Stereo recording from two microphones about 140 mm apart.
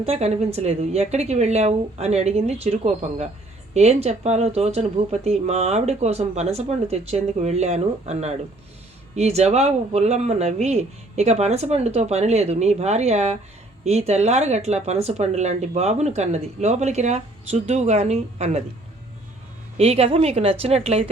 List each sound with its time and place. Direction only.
0.0 s speech: 50° right (ahead or behind)
19.7 s speech: 50° right (ahead or behind)